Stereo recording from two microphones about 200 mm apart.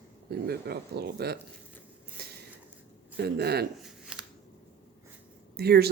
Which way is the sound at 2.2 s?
50° right (ahead or behind).